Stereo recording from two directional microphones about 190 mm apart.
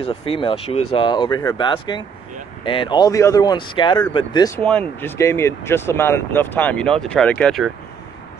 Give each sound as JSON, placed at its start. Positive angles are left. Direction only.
{"t": 0.0, "sound": "speech", "side_deg": 30}
{"t": 4.6, "sound": "speech", "side_deg": 5}